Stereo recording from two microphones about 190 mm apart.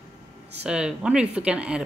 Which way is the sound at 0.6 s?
5° right (ahead or behind).